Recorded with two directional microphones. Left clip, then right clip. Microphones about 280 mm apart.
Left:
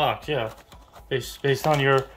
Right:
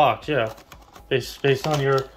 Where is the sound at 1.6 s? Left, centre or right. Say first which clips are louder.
Left 1 dB; left.